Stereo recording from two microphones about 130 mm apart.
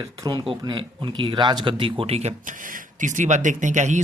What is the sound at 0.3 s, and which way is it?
Speech, 40° right (ahead or behind).